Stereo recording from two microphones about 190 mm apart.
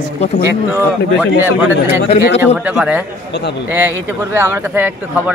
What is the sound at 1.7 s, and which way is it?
Speech, 65° left (ahead or behind).